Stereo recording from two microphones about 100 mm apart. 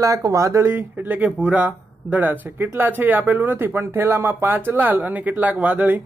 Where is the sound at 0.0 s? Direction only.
35° right (ahead or behind).